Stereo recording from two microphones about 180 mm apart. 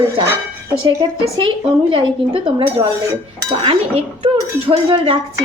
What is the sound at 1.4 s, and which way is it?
A woman's voice, 30° right (ahead or behind).